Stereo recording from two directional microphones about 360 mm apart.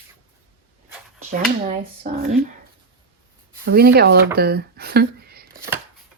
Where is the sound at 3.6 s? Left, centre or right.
Right.